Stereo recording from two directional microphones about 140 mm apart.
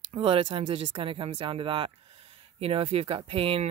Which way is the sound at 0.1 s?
40° right (ahead or behind).